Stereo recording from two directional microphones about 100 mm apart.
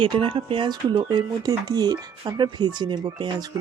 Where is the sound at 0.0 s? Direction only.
60° right (ahead or behind).